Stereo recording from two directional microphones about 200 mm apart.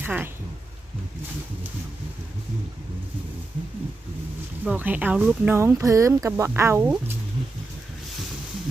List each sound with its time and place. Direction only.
0.0 s speech: 10° right (ahead or behind)
4.6 s speech: 10° right (ahead or behind)